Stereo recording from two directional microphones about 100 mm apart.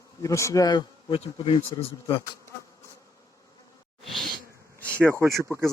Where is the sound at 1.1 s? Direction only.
65° left (ahead or behind).